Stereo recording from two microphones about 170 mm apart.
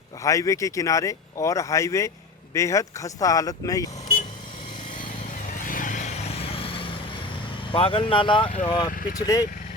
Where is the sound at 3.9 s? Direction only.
45° left (ahead or behind).